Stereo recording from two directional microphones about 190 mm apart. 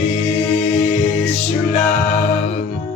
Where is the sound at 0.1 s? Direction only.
35° left (ahead or behind).